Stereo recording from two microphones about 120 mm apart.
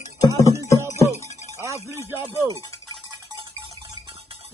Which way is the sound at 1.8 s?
20° right (ahead or behind).